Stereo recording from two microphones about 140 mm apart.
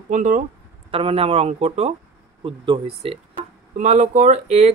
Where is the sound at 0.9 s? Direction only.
45° right (ahead or behind).